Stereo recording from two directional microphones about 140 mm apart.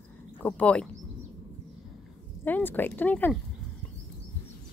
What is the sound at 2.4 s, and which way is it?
Speech, 15° left (ahead or behind).